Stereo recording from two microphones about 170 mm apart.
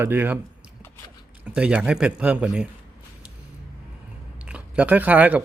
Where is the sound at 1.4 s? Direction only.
5° right (ahead or behind).